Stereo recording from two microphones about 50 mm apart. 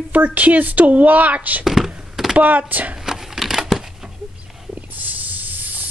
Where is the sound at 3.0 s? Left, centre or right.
Centre.